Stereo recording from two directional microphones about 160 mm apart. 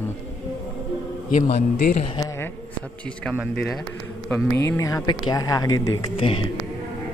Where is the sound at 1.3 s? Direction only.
45° left (ahead or behind).